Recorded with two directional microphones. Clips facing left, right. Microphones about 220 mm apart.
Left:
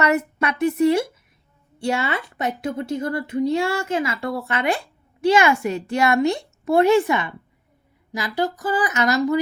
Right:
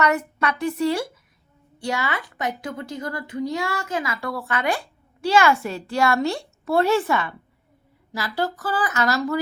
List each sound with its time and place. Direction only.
0.0 s a woman's voice: 25° left (ahead or behind)